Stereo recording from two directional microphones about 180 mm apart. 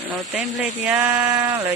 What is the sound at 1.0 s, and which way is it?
Speech, 15° right (ahead or behind).